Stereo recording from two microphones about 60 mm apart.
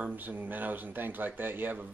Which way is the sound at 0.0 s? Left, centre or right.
Right.